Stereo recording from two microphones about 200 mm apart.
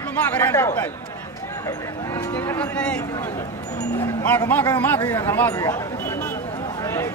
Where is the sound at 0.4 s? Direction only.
10° left (ahead or behind).